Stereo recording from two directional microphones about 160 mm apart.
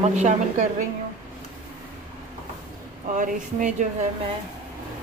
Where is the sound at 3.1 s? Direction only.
55° right (ahead or behind).